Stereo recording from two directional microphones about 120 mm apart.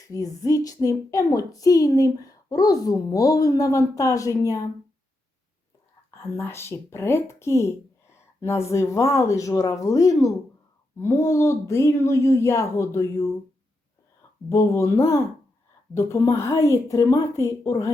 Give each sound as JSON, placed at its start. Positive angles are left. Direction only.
{"t": 0.0, "sound": "a woman's voice", "side_deg": 30}
{"t": 6.3, "sound": "a woman's voice", "side_deg": 20}
{"t": 14.5, "sound": "a woman's voice", "side_deg": 25}